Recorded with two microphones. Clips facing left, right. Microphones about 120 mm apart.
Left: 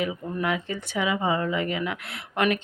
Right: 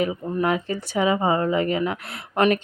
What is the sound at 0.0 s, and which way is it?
Speech, 35° right (ahead or behind).